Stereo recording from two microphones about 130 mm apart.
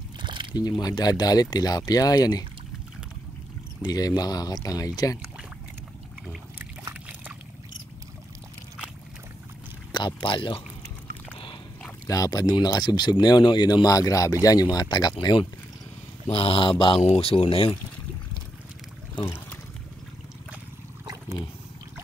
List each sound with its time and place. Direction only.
0.2 s a sound: 40° right (ahead or behind)
0.6 s speech: 30° left (ahead or behind)
3.8 s speech: 30° left (ahead or behind)
6.6 s a sound: 15° right (ahead or behind)
9.9 s speech: 40° left (ahead or behind)
12.1 s speech: 30° left (ahead or behind)
16.3 s speech: 45° left (ahead or behind)
17.0 s speech: 55° left (ahead or behind)
19.2 s a sound: 15° left (ahead or behind)